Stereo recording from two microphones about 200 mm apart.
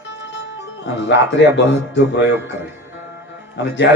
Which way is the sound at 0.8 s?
65° left (ahead or behind).